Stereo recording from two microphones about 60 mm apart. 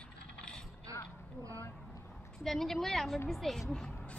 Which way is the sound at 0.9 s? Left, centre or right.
Right.